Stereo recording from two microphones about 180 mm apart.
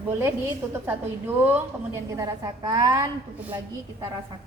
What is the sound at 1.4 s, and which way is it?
A woman's voice, 10° right (ahead or behind).